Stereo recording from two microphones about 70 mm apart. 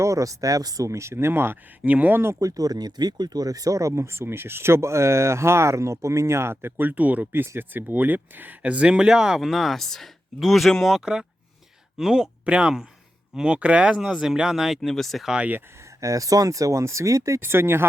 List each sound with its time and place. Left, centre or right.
0.0 s speech: right
1.8 s speech: right
2.4 s speech: right; by 15.3 s centre
15.3 s speech: centre
16.0 s speech: right
17.4 s speech: right